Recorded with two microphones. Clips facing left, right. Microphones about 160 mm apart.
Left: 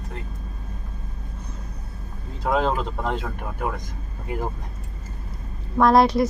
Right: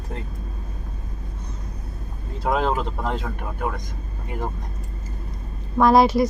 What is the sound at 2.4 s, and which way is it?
Speech, 5° right (ahead or behind).